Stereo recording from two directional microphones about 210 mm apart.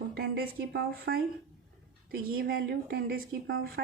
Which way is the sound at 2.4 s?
50° right (ahead or behind).